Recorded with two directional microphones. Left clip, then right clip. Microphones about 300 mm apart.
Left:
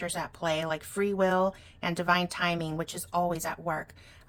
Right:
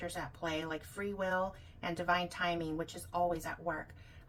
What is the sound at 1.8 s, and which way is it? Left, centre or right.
A woman's voice, left.